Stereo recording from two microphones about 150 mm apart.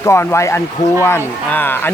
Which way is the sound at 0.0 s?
20° left (ahead or behind).